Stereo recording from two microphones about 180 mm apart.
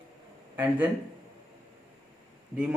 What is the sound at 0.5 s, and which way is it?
Speech, 10° right (ahead or behind).